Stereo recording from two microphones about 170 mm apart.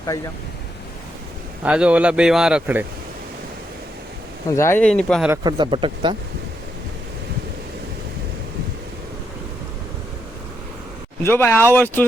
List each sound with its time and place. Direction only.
1.6 s speech: 5° right (ahead or behind)
4.5 s speech: 15° left (ahead or behind)
4.8 s speech: 5° left (ahead or behind)
5.4 s speech: 25° right (ahead or behind)
11.2 s speech: 15° left (ahead or behind)